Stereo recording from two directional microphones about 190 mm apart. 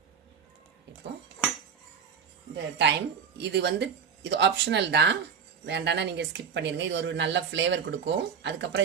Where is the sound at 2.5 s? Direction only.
65° right (ahead or behind).